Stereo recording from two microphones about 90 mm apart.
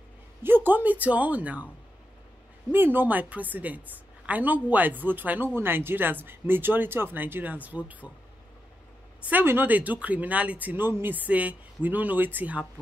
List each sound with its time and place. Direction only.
0.7 s speech: 20° right (ahead or behind)
2.7 s a woman's voice: 20° right (ahead or behind)
9.2 s a woman's voice: 20° right (ahead or behind)